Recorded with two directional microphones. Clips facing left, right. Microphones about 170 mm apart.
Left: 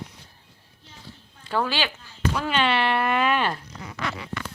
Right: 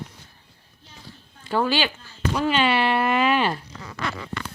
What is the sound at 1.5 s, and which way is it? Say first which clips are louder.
Speech: right 3 dB; 5° right (ahead or behind).